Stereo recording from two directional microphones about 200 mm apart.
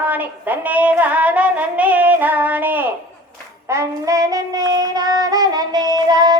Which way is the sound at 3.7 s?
15° right (ahead or behind).